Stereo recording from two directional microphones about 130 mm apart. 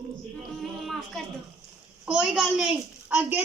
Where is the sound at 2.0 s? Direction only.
5° right (ahead or behind).